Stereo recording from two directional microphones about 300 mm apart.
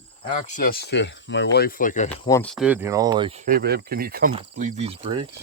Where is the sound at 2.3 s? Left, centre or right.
Centre.